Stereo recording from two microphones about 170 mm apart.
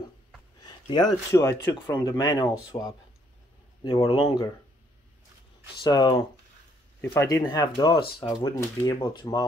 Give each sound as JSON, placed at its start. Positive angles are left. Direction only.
{"t": 0.6, "sound": "a sound", "side_deg": 25}
{"t": 1.3, "sound": "speech", "side_deg": 15}
{"t": 3.8, "sound": "speech", "side_deg": 35}
{"t": 5.8, "sound": "speech", "side_deg": 25}
{"t": 7.0, "sound": "speech", "side_deg": 15}
{"t": 8.5, "sound": "speech", "side_deg": 15}